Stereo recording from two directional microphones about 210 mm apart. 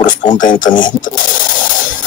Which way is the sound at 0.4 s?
40° left (ahead or behind).